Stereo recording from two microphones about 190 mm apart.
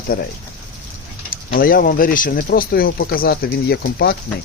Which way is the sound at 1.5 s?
50° left (ahead or behind).